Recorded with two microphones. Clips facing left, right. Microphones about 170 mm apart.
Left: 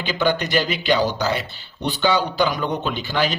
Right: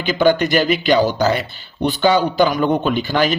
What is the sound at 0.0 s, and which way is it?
A man's voice, 50° right (ahead or behind).